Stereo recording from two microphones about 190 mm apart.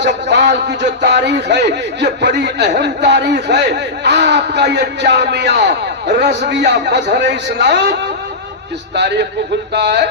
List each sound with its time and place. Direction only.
0.0 s a man's voice: 65° right (ahead or behind)
9.0 s a man's voice: 65° right (ahead or behind)